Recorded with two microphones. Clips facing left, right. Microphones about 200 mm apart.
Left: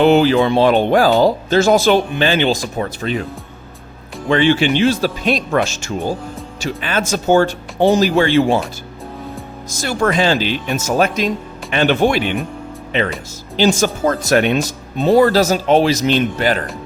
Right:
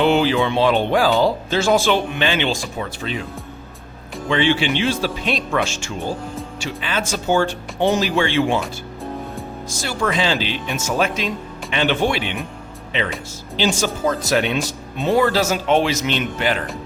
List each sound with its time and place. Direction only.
0.0 s speech: 45° left (ahead or behind)
4.3 s speech: 45° left (ahead or behind)
9.8 s speech: 50° left (ahead or behind)
13.7 s speech: 50° left (ahead or behind)